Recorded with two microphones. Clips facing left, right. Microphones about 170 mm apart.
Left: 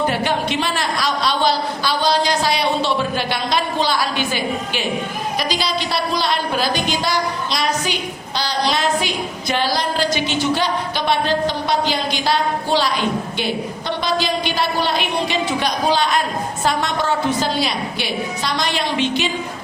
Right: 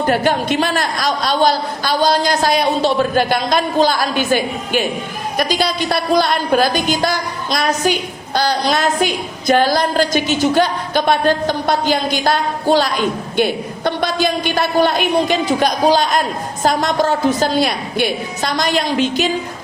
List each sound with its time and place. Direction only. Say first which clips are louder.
0.0 s a woman's voice: right 4 dB; 45° right (ahead or behind)